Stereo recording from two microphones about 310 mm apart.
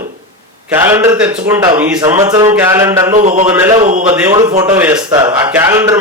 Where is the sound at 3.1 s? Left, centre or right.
Right.